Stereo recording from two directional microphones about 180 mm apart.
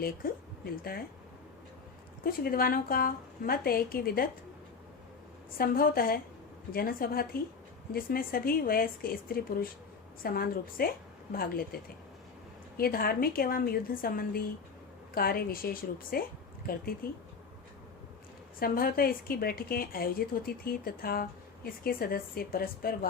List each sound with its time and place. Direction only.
0.0 s a woman's voice: 55° left (ahead or behind)
2.2 s a woman's voice: 55° left (ahead or behind)
5.5 s a woman's voice: 55° left (ahead or behind)
18.6 s a woman's voice: 55° left (ahead or behind)